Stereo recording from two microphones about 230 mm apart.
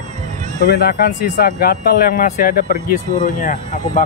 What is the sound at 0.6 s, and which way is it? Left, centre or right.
Speech, left.